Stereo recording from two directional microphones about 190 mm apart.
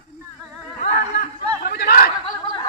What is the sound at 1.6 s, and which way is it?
Chatter, 55° left (ahead or behind).